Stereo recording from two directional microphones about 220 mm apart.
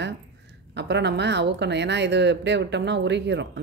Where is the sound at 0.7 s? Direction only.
50° right (ahead or behind).